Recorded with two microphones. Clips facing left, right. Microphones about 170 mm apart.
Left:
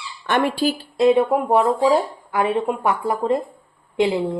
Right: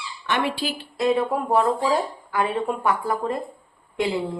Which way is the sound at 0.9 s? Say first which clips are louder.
Left 5 dB; 25° left (ahead or behind).